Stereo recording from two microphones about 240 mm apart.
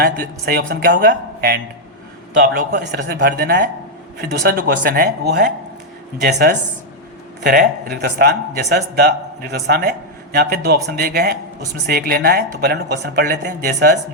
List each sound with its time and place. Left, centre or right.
0.0 s speech: right